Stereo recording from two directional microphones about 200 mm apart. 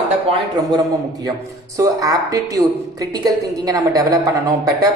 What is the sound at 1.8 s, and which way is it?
A woman's voice, 15° right (ahead or behind).